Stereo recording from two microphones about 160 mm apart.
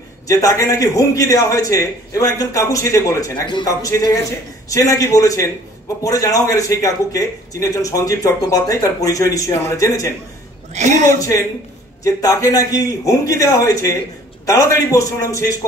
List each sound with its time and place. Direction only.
0.3 s a man's voice: 20° left (ahead or behind)
10.7 s a man's voice: 45° right (ahead or behind)
11.1 s a man's voice: 20° left (ahead or behind)